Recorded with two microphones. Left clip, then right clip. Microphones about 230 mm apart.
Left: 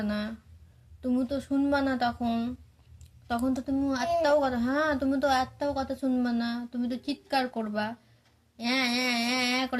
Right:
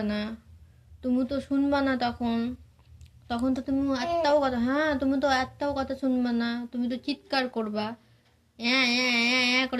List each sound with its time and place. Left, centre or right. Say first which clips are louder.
0.0 s a woman's voice: right 1 dB; left